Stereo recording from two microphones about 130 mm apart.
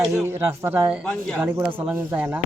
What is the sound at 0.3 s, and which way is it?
Speech, 20° right (ahead or behind).